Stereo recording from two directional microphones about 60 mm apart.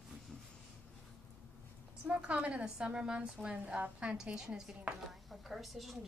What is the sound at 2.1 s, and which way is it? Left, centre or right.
A woman's voice, right.